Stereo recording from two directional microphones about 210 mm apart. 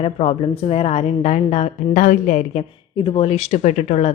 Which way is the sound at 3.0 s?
25° left (ahead or behind).